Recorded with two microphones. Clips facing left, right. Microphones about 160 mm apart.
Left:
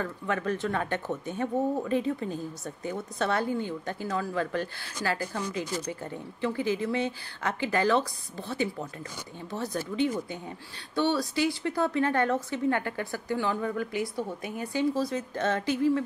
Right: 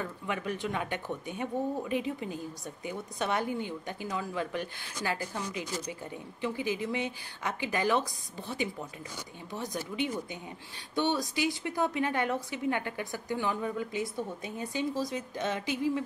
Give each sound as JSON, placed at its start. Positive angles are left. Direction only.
{"t": 0.0, "sound": "speech", "side_deg": -15}